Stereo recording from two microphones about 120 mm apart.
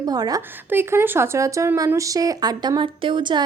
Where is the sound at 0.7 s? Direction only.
20° right (ahead or behind); by 3.4 s 40° right (ahead or behind).